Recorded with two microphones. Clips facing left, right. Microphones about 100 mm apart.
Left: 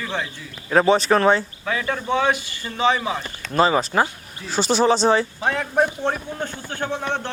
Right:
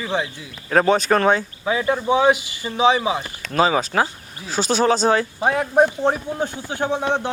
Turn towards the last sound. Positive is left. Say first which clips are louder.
# right 4 dB
turn(degrees=-15)  # may be behind; listen again after turning